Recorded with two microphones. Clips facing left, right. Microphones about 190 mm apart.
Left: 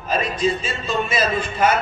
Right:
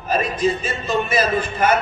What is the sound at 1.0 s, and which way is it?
Speech, 60° right (ahead or behind).